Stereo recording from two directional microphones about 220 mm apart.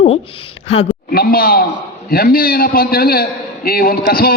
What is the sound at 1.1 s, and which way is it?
A man's voice, 45° left (ahead or behind).